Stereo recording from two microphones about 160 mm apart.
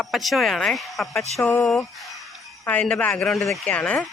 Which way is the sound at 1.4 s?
10° left (ahead or behind).